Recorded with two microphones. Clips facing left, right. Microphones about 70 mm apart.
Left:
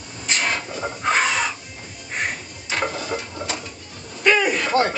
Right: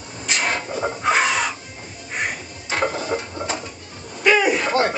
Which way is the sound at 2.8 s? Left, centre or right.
Right.